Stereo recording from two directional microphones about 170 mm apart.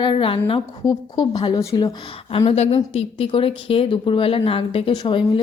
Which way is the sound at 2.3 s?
35° left (ahead or behind).